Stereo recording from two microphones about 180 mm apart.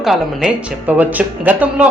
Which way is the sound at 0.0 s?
Centre (ahead or behind).